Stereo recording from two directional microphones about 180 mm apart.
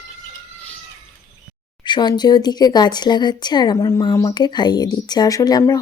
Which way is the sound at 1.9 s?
25° left (ahead or behind).